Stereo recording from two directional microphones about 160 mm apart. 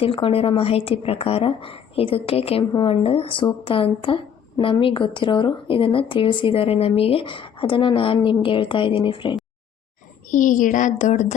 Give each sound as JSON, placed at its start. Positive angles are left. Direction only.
{"t": 0.0, "sound": "a woman's voice", "side_deg": 35}
{"t": 10.2, "sound": "a child's voice", "side_deg": 55}